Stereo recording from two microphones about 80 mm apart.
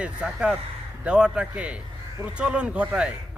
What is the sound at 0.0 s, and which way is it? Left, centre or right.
Speech, centre.